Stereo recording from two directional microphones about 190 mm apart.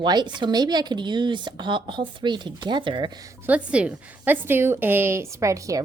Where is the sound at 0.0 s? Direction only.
20° right (ahead or behind).